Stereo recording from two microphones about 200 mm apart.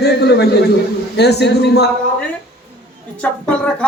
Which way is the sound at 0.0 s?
55° left (ahead or behind).